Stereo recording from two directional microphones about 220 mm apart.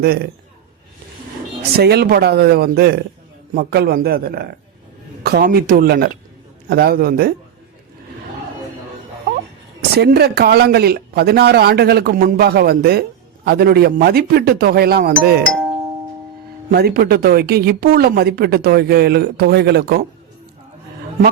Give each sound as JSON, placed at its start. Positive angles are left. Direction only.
{"t": 0.0, "sound": "speech", "side_deg": -45}
{"t": 1.7, "sound": "speech", "side_deg": -45}
{"t": 10.0, "sound": "speech", "side_deg": -45}
{"t": 16.7, "sound": "speech", "side_deg": -45}